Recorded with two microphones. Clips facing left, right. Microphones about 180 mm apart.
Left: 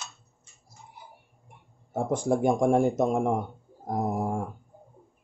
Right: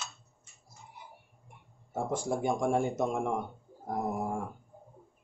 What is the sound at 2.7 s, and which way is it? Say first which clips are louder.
Speech: left 6 dB; 40° left (ahead or behind).